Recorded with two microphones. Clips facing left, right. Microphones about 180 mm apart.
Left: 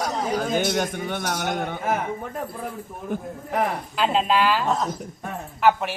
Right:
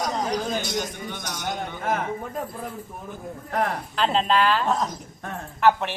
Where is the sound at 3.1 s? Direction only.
55° left (ahead or behind).